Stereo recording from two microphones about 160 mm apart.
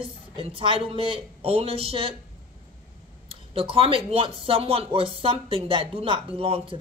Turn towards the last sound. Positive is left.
turn(degrees=-35)  # may be behind; listen again after turning